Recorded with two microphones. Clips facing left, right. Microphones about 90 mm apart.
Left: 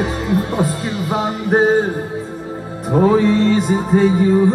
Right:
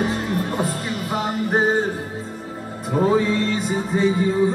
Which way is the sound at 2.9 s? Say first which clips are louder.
Left 6 dB; 50° left (ahead or behind).